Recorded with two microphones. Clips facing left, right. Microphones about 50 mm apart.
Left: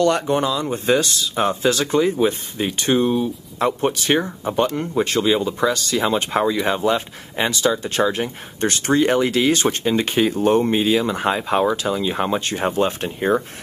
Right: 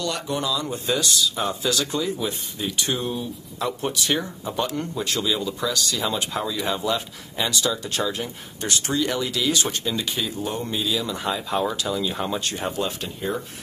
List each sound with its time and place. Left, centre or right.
0.0 s speech: left